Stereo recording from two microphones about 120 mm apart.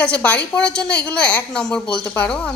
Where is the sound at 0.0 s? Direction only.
10° left (ahead or behind).